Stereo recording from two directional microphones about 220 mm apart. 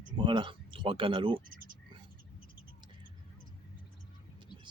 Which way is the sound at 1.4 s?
40° right (ahead or behind).